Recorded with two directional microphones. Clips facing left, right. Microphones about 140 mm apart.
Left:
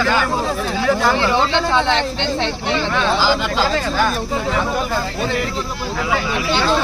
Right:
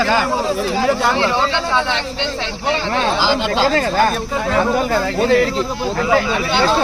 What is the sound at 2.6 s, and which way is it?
Speech, 35° right (ahead or behind).